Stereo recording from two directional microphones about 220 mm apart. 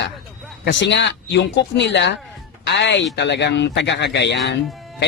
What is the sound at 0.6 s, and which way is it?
Speech, 55° left (ahead or behind).